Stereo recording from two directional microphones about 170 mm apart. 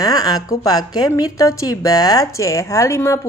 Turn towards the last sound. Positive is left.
turn(degrees=15)  # may be behind; listen again after turning